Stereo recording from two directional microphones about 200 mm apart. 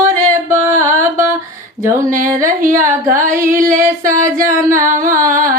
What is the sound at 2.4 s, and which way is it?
Music, 40° right (ahead or behind).